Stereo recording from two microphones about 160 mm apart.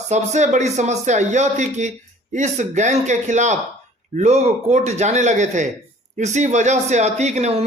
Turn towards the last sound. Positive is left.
turn(degrees=-45)  # may be behind; listen again after turning